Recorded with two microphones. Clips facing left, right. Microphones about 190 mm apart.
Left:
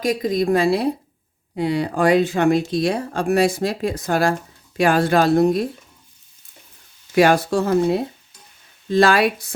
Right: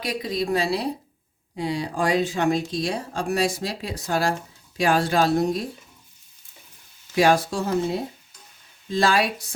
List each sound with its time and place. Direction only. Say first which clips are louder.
0.0 s a woman's voice: left 7 dB; 45° left (ahead or behind)
7.2 s speech: left 4 dB; 60° left (ahead or behind)